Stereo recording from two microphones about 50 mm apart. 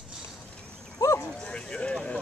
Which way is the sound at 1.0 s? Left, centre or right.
Left.